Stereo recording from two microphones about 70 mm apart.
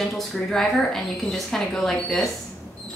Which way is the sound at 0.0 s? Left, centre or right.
Centre.